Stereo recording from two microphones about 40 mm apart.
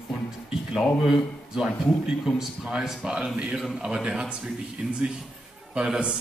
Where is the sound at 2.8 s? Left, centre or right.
Centre.